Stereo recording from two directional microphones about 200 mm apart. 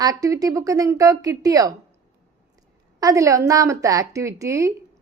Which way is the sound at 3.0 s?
15° right (ahead or behind).